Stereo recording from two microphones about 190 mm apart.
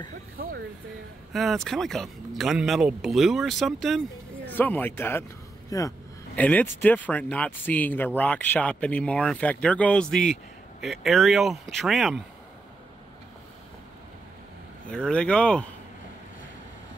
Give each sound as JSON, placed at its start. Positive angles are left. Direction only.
{"t": 0.4, "sound": "a sound", "side_deg": -55}
{"t": 1.3, "sound": "speech", "side_deg": 0}
{"t": 14.9, "sound": "speech", "side_deg": 5}